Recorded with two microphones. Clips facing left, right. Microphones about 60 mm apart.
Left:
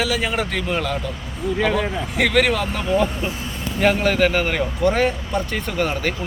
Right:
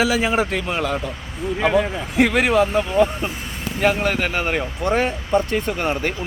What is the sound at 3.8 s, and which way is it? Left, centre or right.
A man's voice, centre.